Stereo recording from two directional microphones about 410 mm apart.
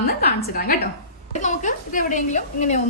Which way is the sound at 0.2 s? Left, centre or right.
Centre.